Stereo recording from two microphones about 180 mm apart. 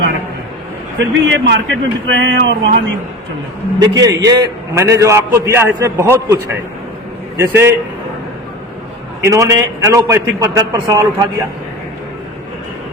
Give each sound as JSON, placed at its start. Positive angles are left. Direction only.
{"t": 0.9, "sound": "speech", "side_deg": -80}
{"t": 3.8, "sound": "a man's voice", "side_deg": -20}
{"t": 9.2, "sound": "a man's voice", "side_deg": -15}